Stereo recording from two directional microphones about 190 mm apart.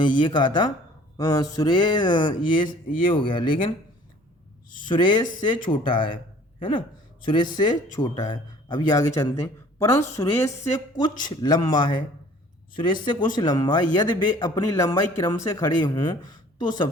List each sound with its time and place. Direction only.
0.2 s a man's voice: 25° left (ahead or behind)
4.9 s a man's voice: 25° left (ahead or behind)